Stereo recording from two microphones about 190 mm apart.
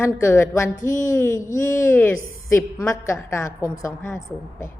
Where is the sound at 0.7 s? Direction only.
45° left (ahead or behind).